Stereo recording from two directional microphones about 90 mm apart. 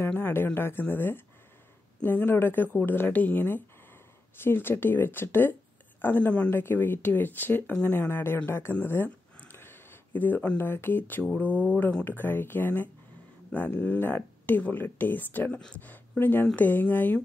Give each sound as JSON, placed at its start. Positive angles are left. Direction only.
{"t": 0.0, "sound": "speech", "side_deg": 25}
{"t": 8.7, "sound": "a sound", "side_deg": 25}
{"t": 10.6, "sound": "speech", "side_deg": 25}